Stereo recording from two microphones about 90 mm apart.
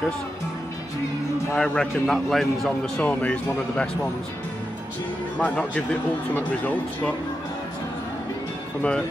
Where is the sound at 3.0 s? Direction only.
15° left (ahead or behind).